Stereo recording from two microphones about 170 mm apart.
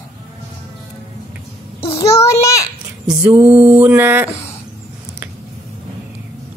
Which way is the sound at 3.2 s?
10° right (ahead or behind).